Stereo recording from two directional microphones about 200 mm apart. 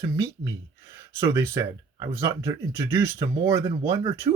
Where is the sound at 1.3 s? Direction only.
15° right (ahead or behind).